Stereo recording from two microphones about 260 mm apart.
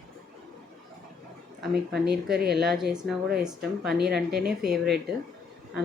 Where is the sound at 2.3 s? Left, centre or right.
Right.